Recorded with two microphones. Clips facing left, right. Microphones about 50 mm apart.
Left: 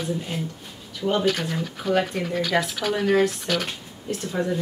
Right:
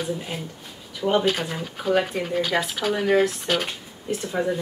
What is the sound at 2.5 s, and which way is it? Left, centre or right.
Speech, centre.